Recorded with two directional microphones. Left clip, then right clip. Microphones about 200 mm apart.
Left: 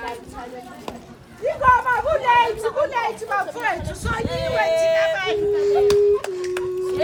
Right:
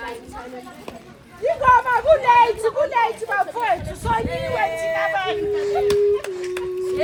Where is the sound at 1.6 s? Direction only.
35° right (ahead or behind).